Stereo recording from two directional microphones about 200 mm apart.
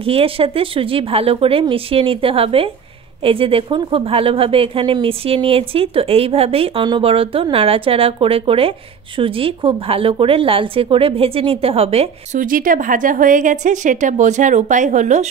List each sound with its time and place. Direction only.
0.0 s speech: 30° right (ahead or behind)
12.4 s a woman's voice: 45° right (ahead or behind)